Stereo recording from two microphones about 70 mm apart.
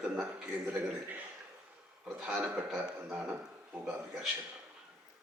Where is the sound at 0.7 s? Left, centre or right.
Right.